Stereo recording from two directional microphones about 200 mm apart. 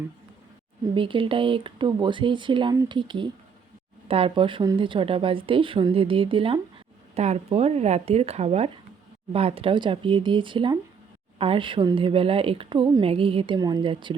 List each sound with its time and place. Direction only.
0.9 s a woman's voice: 25° right (ahead or behind)